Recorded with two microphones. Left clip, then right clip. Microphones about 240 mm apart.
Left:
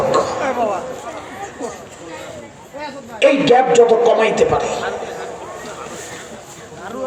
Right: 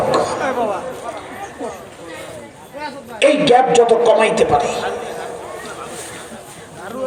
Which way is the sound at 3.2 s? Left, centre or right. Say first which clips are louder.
Even; right.